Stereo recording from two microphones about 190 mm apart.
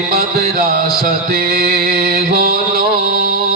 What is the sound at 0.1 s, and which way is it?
Music, 50° right (ahead or behind).